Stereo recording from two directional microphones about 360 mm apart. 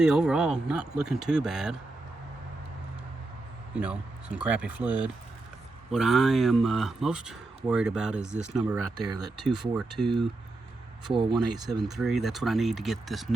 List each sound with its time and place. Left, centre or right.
0.0 s speech: centre
3.8 s speech: centre
11.1 s speech: centre